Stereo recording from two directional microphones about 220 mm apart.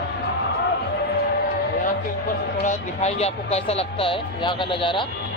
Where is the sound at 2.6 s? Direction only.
30° left (ahead or behind).